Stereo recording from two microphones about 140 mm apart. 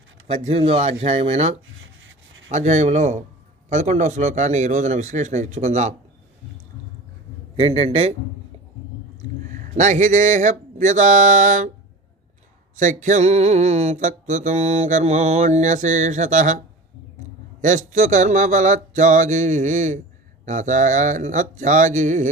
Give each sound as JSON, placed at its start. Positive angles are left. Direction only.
{"t": 0.4, "sound": "speech", "side_deg": -45}
{"t": 2.5, "sound": "mantra", "side_deg": -55}
{"t": 7.5, "sound": "speech", "side_deg": -45}
{"t": 9.6, "sound": "mantra", "side_deg": -60}
{"t": 12.7, "sound": "mantra", "side_deg": -65}
{"t": 17.6, "sound": "mantra", "side_deg": -65}